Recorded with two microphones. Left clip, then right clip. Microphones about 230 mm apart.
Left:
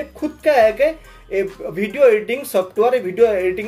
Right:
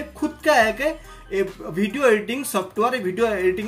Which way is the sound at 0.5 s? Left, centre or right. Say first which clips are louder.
Left 5 dB; left.